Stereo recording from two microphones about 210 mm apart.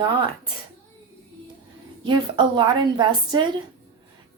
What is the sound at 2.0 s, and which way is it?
A woman's voice, 20° right (ahead or behind).